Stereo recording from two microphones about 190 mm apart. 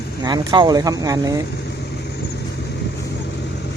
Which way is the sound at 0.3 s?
20° right (ahead or behind).